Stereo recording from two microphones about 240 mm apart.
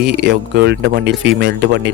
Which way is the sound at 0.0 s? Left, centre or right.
Right.